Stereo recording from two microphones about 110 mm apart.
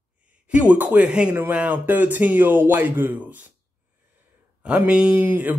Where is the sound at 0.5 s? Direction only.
15° right (ahead or behind).